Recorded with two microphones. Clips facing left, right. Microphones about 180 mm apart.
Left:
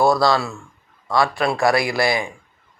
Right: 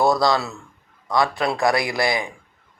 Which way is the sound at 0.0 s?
20° right (ahead or behind).